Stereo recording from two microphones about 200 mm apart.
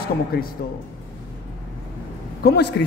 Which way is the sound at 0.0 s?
50° left (ahead or behind).